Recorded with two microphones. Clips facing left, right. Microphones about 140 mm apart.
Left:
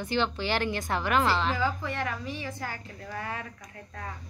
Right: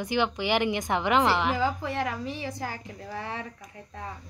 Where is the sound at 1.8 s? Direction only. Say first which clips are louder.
Right 3 dB; 35° right (ahead or behind).